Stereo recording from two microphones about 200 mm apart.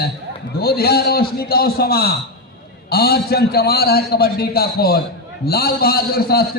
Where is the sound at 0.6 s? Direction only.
50° left (ahead or behind).